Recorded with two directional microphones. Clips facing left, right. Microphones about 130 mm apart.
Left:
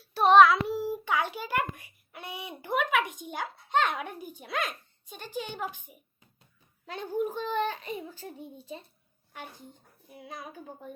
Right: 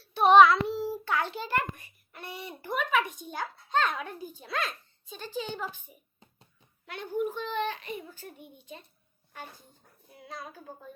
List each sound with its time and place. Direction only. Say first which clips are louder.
0.1 s child singing: even; centre (ahead or behind)
0.8 s a sound: left 1 dB; 15° left (ahead or behind)
3.8 s speech: even; 15° left (ahead or behind)
6.8 s a child's voice: left 1 dB; 35° left (ahead or behind)
9.3 s speech: left 1 dB; 15° left (ahead or behind)